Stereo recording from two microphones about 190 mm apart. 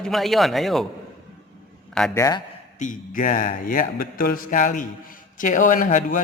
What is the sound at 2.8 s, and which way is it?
Speech, 45° left (ahead or behind).